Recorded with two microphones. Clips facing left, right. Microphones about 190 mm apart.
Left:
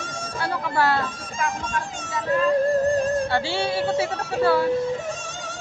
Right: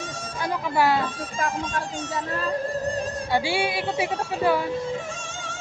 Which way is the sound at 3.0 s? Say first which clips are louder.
Left 7 dB; 50° left (ahead or behind).